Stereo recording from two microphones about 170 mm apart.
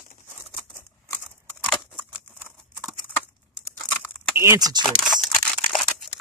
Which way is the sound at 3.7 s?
15° left (ahead or behind).